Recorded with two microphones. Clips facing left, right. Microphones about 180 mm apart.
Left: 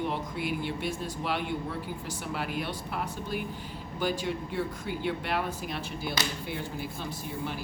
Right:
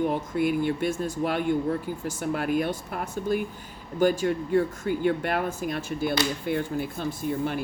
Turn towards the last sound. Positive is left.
turn(degrees=-50)  # may be behind; listen again after turning